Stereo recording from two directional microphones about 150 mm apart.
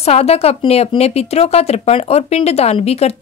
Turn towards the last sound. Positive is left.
turn(degrees=45)  # may be behind; listen again after turning